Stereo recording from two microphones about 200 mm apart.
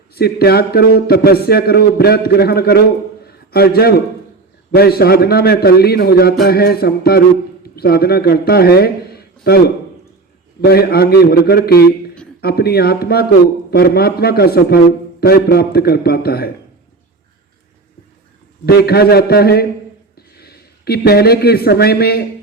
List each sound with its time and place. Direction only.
0.1 s speech: 50° left (ahead or behind)
3.2 s a sound: 50° left (ahead or behind)
4.7 s a man's voice: 50° left (ahead or behind)
18.6 s speech: 50° left (ahead or behind)